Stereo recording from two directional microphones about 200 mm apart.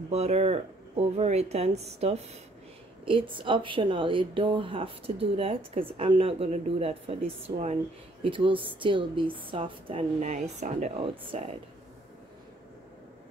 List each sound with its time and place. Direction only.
0.1 s speech: 35° right (ahead or behind)